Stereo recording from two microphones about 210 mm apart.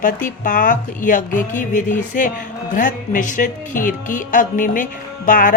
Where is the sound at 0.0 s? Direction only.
40° left (ahead or behind).